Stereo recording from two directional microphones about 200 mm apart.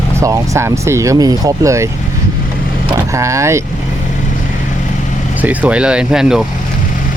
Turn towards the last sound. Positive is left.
turn(degrees=-5)  # may be behind; listen again after turning